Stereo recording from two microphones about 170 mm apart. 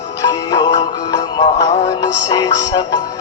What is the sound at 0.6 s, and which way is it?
Music, 45° left (ahead or behind).